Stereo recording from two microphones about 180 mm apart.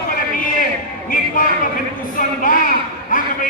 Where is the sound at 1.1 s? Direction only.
50° left (ahead or behind).